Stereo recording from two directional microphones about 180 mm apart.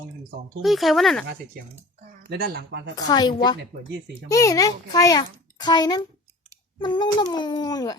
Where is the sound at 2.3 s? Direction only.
60° right (ahead or behind).